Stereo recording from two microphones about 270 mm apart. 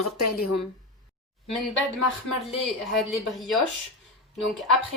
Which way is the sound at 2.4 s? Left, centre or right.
Centre.